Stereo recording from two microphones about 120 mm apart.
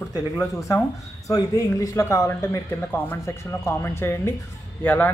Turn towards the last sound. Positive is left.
turn(degrees=15)  # may be behind; listen again after turning